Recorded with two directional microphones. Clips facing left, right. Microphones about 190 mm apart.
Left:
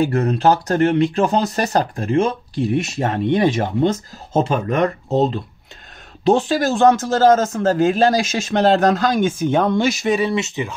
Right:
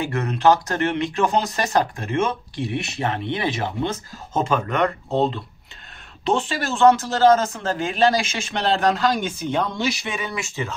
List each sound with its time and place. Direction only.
0.1 s speech: 35° left (ahead or behind)
10.3 s speech: 20° left (ahead or behind)